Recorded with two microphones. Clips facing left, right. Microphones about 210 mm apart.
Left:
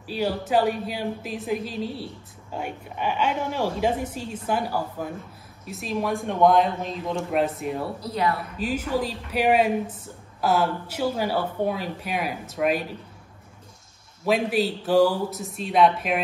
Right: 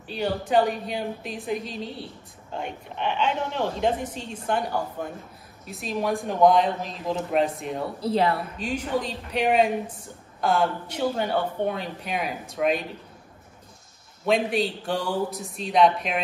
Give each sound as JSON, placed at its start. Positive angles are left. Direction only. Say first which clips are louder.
{"t": 0.0, "sound": "a woman's voice", "louder": "left 1 dB", "side_deg": 5}
{"t": 8.0, "sound": "a woman's voice", "louder": "right 5 dB", "side_deg": -30}
{"t": 8.5, "sound": "speech", "louder": "left 2 dB", "side_deg": 5}
{"t": 14.2, "sound": "speech", "louder": "left 1 dB", "side_deg": 5}